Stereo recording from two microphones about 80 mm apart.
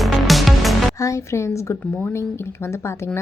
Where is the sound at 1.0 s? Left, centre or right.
Left.